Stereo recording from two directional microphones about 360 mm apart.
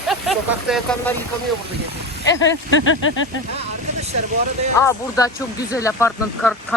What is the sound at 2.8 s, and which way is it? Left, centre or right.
Speech, left.